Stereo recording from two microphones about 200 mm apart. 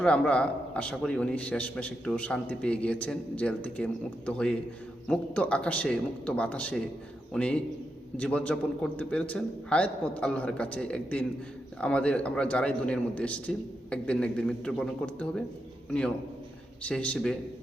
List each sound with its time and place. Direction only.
0.0 s a man's voice: 5° left (ahead or behind)